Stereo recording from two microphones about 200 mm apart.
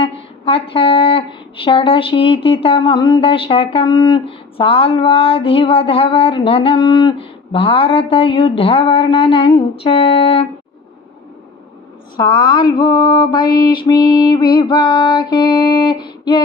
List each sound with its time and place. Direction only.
0.0 s speech: 25° left (ahead or behind)
12.1 s speech: 20° left (ahead or behind)